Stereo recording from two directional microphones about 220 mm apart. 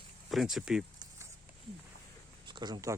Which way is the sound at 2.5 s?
20° right (ahead or behind).